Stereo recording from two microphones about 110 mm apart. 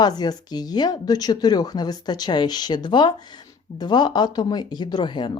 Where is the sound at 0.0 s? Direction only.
40° left (ahead or behind).